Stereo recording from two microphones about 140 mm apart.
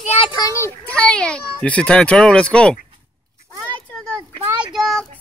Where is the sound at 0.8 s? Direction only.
10° left (ahead or behind).